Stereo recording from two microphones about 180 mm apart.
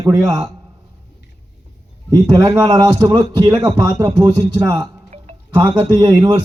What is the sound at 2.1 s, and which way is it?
A man's voice, 20° right (ahead or behind).